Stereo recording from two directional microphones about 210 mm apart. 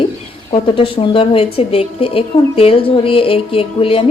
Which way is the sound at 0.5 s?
25° left (ahead or behind).